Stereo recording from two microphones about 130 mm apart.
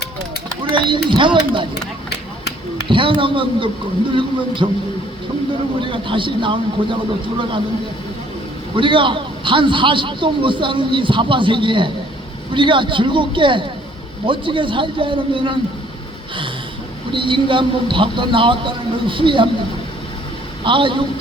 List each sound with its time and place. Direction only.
0.6 s speech: 40° right (ahead or behind)
2.9 s a man's voice: 40° right (ahead or behind)
5.8 s a man's voice: 40° right (ahead or behind)
8.7 s a man's voice: 40° right (ahead or behind)
17.1 s a man's voice: 40° right (ahead or behind)
20.7 s a man's voice: 40° right (ahead or behind)